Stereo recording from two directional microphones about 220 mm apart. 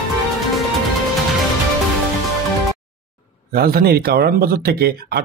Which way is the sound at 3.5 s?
45° right (ahead or behind).